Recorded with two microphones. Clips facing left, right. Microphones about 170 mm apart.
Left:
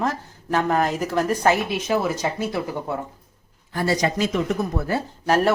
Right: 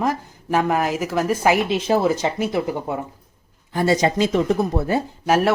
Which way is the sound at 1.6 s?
30° right (ahead or behind).